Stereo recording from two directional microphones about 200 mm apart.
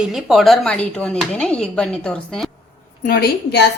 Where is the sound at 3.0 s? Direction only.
50° left (ahead or behind).